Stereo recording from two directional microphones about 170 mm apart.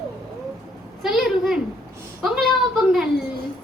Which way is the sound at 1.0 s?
Centre (ahead or behind).